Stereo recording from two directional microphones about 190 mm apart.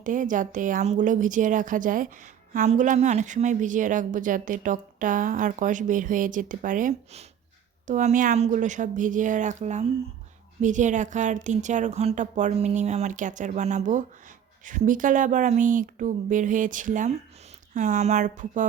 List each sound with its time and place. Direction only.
0.0 s speech: 45° right (ahead or behind)